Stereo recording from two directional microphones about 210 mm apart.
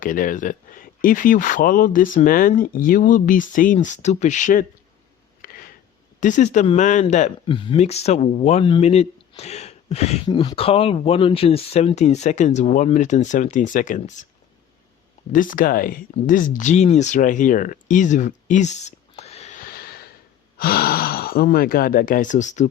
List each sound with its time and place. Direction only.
0.0 s speech: 40° left (ahead or behind)
5.4 s a sound: 45° left (ahead or behind)
6.1 s speech: 35° left (ahead or behind)
15.3 s speech: 40° left (ahead or behind)